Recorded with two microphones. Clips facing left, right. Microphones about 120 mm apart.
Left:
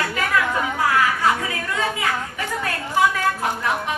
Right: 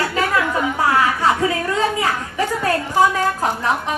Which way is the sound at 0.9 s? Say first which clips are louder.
Right 2 dB; 30° right (ahead or behind).